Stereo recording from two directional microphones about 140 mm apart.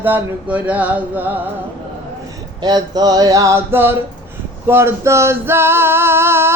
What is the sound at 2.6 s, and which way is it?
Music, 30° right (ahead or behind).